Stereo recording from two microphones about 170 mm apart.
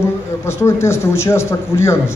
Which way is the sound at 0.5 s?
15° left (ahead or behind).